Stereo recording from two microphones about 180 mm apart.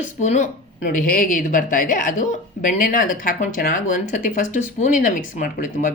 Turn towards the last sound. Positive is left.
turn(degrees=45)  # may be behind; listen again after turning